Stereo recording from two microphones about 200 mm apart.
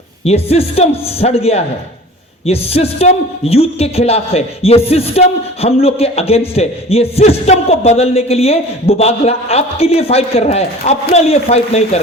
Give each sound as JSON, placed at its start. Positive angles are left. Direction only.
{"t": 0.3, "sound": "a man's voice", "side_deg": 30}